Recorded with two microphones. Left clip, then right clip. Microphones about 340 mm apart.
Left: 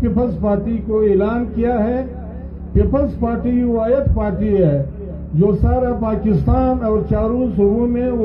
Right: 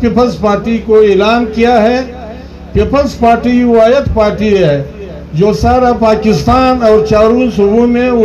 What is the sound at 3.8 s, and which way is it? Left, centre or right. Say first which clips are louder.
Speech: right 10 dB; right.